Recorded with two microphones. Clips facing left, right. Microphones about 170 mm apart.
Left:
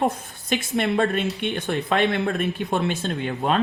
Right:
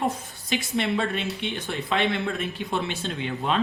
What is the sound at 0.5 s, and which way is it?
Speech, 50° left (ahead or behind).